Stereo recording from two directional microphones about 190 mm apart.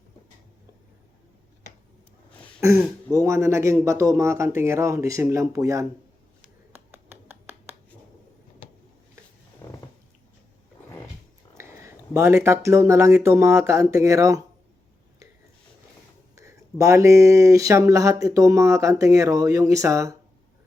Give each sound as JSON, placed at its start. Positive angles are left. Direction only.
{"t": 2.6, "sound": "speech", "side_deg": -15}
{"t": 6.7, "sound": "a sound", "side_deg": -10}
{"t": 9.6, "sound": "stomach rumble", "side_deg": 15}
{"t": 11.5, "sound": "speech", "side_deg": -15}
{"t": 16.3, "sound": "speech", "side_deg": -15}